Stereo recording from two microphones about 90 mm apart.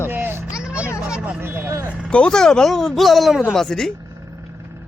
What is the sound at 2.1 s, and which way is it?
Speech, 10° left (ahead or behind).